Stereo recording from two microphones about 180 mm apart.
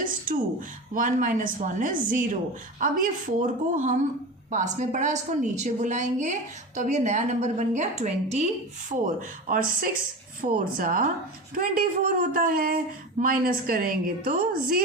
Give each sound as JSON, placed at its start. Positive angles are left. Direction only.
{"t": 0.3, "sound": "a woman's voice", "side_deg": -50}
{"t": 8.9, "sound": "speech", "side_deg": -50}